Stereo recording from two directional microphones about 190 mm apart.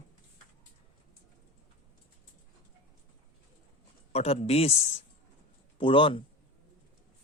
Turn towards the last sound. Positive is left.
turn(degrees=25)  # may be behind; listen again after turning